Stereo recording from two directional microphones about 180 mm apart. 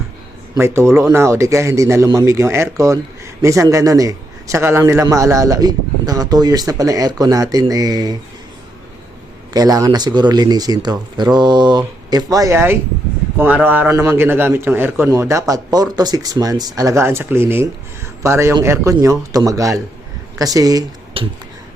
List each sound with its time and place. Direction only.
0.5 s a man's voice: 15° right (ahead or behind)
9.5 s a man's voice: 20° right (ahead or behind)